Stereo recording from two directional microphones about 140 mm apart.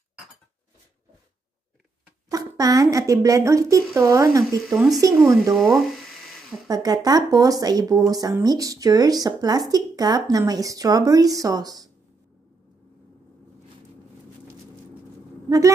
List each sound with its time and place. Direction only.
2.2 s speech: 25° right (ahead or behind)
4.7 s speech: 5° right (ahead or behind)
5.0 s speech: 20° right (ahead or behind)
5.4 s speech: centre (ahead or behind)
6.7 s speech: 25° right (ahead or behind)